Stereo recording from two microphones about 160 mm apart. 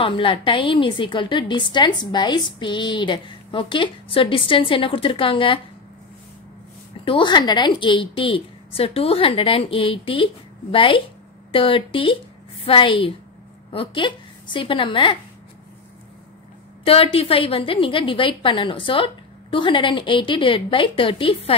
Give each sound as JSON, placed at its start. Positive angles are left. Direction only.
{"t": 0.0, "sound": "a woman's voice", "side_deg": 35}
{"t": 7.1, "sound": "a woman's voice", "side_deg": 30}
{"t": 16.8, "sound": "a woman's voice", "side_deg": 35}